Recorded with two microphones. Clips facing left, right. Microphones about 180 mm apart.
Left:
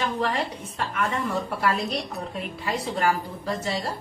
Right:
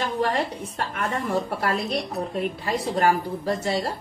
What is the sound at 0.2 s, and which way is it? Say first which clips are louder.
A woman's voice: right 2 dB; 40° right (ahead or behind).